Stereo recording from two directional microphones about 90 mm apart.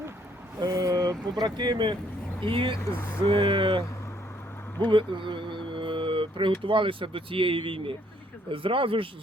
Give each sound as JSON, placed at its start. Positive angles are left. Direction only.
{"t": 0.6, "sound": "speech", "side_deg": -40}
{"t": 2.4, "sound": "speech", "side_deg": -70}
{"t": 2.7, "sound": "speech", "side_deg": 35}
{"t": 3.2, "sound": "speech", "side_deg": -80}
{"t": 4.9, "sound": "speech", "side_deg": -65}